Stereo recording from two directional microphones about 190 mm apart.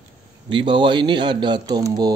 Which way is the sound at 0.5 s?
25° right (ahead or behind).